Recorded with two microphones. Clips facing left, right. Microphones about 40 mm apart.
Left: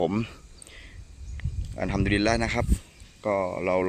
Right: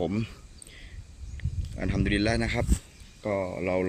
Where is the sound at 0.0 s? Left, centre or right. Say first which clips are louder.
Left 3 dB; left.